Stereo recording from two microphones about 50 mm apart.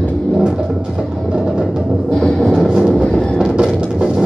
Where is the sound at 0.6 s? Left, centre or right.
Centre.